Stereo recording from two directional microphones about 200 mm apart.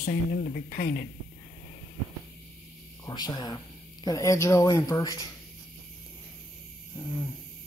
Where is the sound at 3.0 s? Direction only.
20° left (ahead or behind).